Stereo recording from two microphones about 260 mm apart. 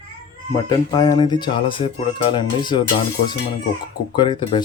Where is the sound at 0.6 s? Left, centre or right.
Centre.